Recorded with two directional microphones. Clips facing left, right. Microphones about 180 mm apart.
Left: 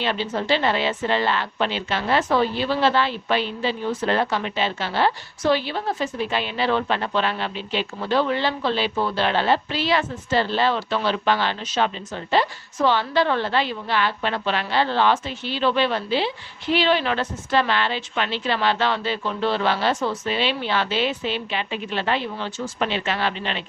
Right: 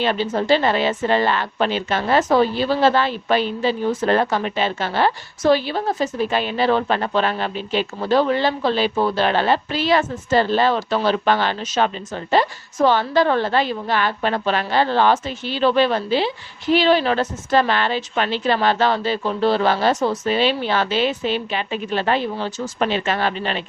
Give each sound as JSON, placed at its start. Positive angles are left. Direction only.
{"t": 0.0, "sound": "a woman's voice", "side_deg": -45}